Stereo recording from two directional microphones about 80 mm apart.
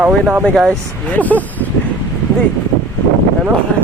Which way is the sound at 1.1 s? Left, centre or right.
Centre.